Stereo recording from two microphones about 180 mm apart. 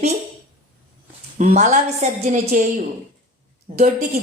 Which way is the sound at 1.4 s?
40° right (ahead or behind).